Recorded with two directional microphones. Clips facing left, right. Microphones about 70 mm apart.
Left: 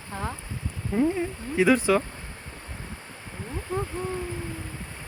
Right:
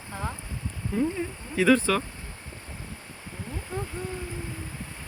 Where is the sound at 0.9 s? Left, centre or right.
Left.